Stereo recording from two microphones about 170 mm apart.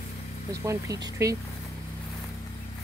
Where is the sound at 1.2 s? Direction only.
20° right (ahead or behind).